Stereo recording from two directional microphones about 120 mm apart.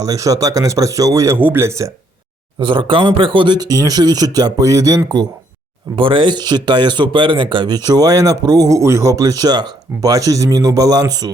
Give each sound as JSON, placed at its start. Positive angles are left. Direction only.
{"t": 0.0, "sound": "speech", "side_deg": -30}
{"t": 2.6, "sound": "speech", "side_deg": -40}
{"t": 6.0, "sound": "speech", "side_deg": -45}